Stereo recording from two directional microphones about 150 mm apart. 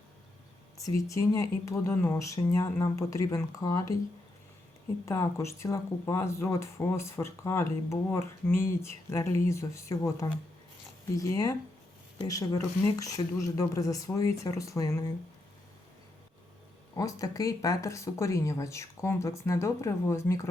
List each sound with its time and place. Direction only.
0.8 s speech: 20° left (ahead or behind)
5.0 s speech: 20° left (ahead or behind)
16.9 s speech: 20° left (ahead or behind)